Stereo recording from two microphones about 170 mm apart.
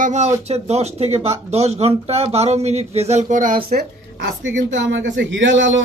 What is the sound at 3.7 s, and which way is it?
A woman's voice, 80° right.